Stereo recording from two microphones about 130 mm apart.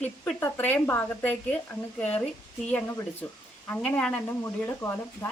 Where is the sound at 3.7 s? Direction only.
10° left (ahead or behind).